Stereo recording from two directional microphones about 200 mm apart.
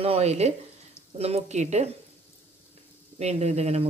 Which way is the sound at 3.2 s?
35° right (ahead or behind).